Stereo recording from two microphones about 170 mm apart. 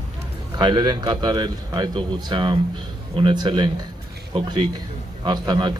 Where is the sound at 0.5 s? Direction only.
25° right (ahead or behind).